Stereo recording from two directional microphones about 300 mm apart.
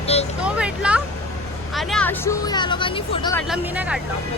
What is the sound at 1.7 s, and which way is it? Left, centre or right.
Speech, centre.